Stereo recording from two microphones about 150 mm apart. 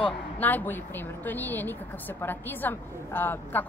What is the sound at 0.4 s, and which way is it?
A woman's voice, 10° left (ahead or behind).